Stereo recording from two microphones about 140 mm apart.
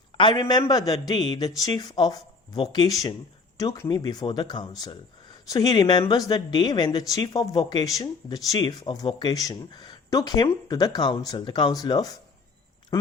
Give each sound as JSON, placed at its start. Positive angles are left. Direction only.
{"t": 0.2, "sound": "a man's voice", "side_deg": 30}